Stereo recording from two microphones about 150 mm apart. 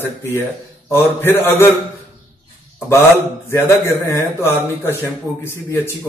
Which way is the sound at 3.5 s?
15° left (ahead or behind).